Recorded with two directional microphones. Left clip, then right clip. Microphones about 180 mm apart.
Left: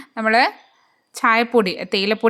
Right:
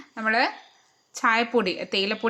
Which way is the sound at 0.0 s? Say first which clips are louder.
Left 7 dB; 35° left (ahead or behind).